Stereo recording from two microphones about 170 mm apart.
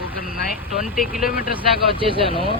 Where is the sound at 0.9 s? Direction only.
Centre (ahead or behind).